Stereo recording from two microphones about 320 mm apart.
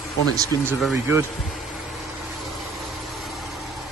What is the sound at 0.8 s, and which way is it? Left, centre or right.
Speech, centre.